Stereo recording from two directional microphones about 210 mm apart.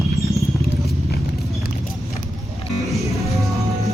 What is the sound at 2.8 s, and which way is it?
Music, centre (ahead or behind).